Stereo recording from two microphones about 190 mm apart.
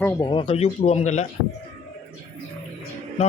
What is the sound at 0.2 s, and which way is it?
A man's voice, 30° left (ahead or behind).